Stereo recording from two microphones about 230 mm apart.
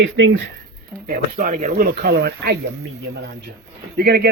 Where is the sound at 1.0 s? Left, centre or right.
Right.